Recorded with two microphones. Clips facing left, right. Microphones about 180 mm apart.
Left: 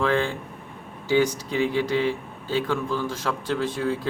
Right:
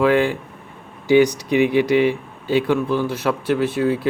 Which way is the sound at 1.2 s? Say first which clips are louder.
Right 7 dB; 75° right (ahead or behind).